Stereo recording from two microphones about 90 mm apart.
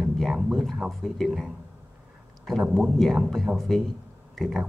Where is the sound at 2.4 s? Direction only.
Centre (ahead or behind).